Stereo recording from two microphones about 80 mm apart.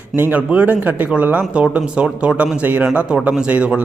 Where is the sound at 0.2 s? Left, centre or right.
Right.